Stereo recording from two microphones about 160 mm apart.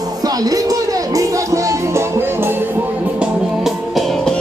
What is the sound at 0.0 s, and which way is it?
Music, 25° right (ahead or behind).